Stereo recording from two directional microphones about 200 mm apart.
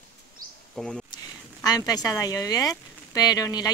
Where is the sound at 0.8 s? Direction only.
5° left (ahead or behind).